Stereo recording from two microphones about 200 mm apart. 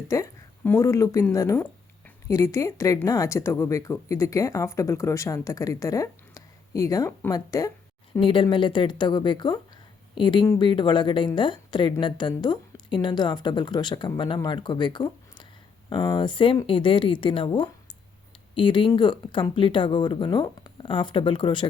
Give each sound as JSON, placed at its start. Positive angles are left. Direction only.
{"t": 0.1, "sound": "speech", "side_deg": 15}